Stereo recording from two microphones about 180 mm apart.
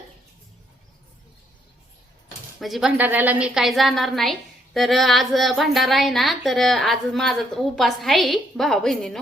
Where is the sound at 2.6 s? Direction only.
Centre (ahead or behind).